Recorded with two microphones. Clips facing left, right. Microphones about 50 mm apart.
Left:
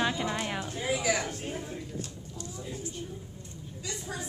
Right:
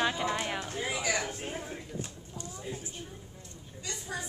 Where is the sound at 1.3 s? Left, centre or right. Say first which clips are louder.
Left 2 dB; centre.